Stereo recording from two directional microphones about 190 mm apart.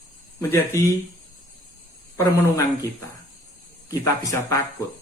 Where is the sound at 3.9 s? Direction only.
15° left (ahead or behind).